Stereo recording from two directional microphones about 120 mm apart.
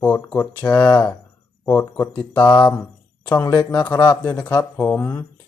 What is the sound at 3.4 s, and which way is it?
Speech, 30° left (ahead or behind).